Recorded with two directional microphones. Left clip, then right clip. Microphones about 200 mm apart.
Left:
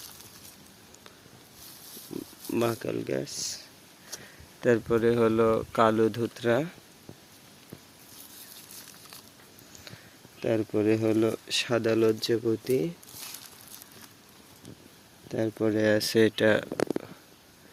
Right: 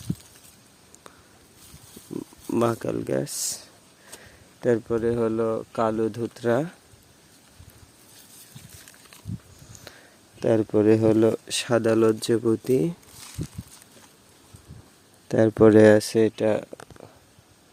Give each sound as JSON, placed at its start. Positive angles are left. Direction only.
{"t": 2.5, "sound": "speech", "side_deg": -30}
{"t": 3.2, "sound": "speech", "side_deg": -45}
{"t": 4.6, "sound": "speech", "side_deg": -15}
{"t": 6.3, "sound": "speech", "side_deg": -25}
{"t": 10.4, "sound": "speech", "side_deg": -30}
{"t": 15.3, "sound": "speech", "side_deg": -45}
{"t": 16.0, "sound": "speech", "side_deg": -20}